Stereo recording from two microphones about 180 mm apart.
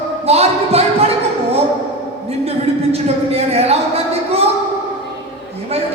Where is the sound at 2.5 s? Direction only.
35° right (ahead or behind).